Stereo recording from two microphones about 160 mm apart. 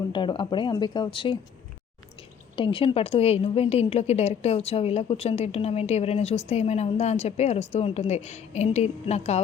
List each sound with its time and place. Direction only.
0.1 s speech: 30° left (ahead or behind)
2.6 s a woman's voice: 30° left (ahead or behind)